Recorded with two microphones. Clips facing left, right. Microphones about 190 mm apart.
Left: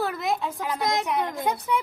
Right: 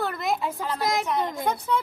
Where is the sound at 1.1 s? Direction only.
15° left (ahead or behind).